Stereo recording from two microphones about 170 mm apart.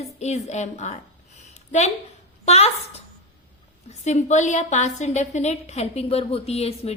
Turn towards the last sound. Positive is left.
turn(degrees=35)  # may be behind; listen again after turning